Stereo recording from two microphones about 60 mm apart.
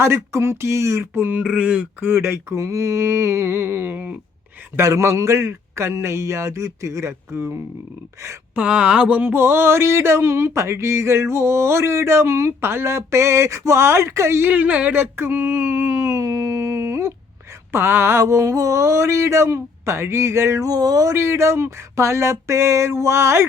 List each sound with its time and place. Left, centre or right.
0.0 s speech: right
1.4 s speech: centre
2.0 s speech: right
4.8 s speech: right
8.5 s speech: right
9.3 s speech: right
14.5 s speech: right
15.1 s a sound: right
17.7 s speech: right
20.7 s speech: right
21.1 s speech: right